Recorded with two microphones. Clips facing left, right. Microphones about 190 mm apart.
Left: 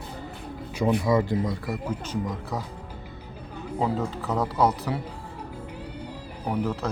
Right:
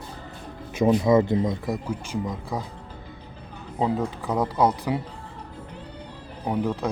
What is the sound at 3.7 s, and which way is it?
Speech, 15° right (ahead or behind).